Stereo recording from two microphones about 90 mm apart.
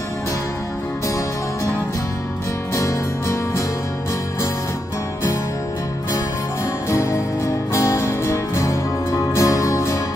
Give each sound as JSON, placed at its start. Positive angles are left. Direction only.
{"t": 2.7, "sound": "music", "side_deg": 35}
{"t": 6.9, "sound": "music", "side_deg": 35}